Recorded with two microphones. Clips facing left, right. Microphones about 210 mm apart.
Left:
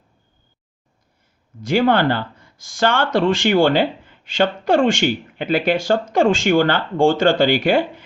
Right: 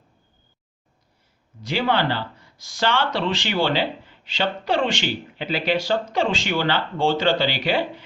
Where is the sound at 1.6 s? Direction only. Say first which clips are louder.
Left 6 dB; 50° left (ahead or behind).